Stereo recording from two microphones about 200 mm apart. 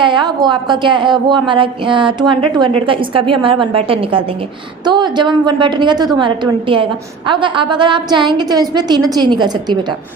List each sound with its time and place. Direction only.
0.0 s a woman's voice: 25° right (ahead or behind)